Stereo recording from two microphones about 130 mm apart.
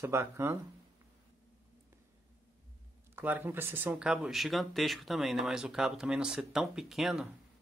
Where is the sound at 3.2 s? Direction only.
15° right (ahead or behind).